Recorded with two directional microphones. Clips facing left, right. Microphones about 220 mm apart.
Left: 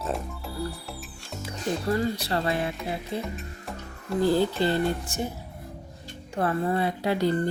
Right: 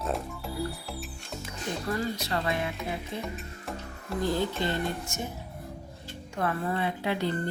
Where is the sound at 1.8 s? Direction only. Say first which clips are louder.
Left 4 dB; 30° left (ahead or behind).